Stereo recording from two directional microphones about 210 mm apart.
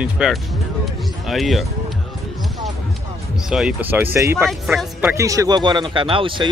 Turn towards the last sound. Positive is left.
turn(degrees=-25)  # may be behind; listen again after turning